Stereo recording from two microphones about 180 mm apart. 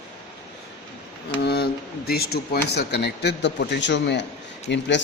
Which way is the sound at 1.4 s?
65° left (ahead or behind).